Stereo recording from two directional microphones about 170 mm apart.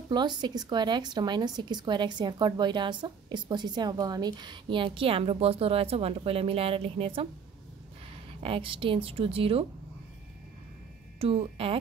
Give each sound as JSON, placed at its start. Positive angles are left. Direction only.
{"t": 0.1, "sound": "speech", "side_deg": -25}
{"t": 8.4, "sound": "a woman's voice", "side_deg": -30}
{"t": 11.1, "sound": "a woman's voice", "side_deg": -35}